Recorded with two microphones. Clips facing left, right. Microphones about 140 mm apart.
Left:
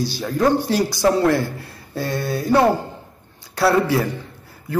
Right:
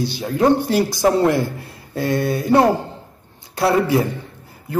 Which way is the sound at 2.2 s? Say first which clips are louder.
Right 1 dB; 25° right (ahead or behind).